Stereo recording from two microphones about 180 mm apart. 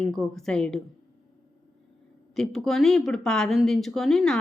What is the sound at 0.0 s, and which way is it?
Speech, centre (ahead or behind).